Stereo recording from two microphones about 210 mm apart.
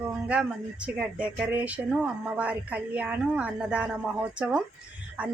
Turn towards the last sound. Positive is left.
turn(degrees=-5)  # may be behind; listen again after turning